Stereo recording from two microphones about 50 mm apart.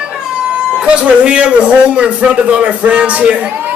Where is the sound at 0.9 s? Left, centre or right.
Centre.